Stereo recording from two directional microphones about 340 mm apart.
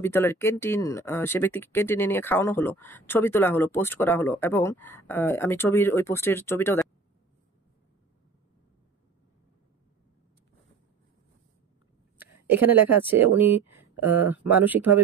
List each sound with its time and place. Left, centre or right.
0.0 s speech: centre
12.2 s a sound: centre
13.0 s speech: centre